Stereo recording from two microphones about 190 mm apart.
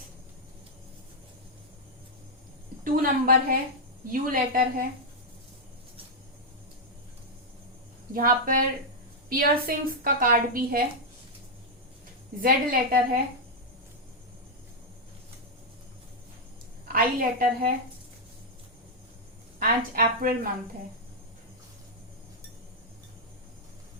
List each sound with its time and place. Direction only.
2.8 s a woman's voice: 50° right (ahead or behind)
8.1 s a woman's voice: 50° right (ahead or behind)
12.4 s a woman's voice: 50° right (ahead or behind)
16.9 s a woman's voice: 50° right (ahead or behind)
19.5 s a woman's voice: 50° right (ahead or behind)